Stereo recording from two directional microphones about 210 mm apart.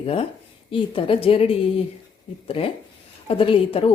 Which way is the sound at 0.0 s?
25° left (ahead or behind).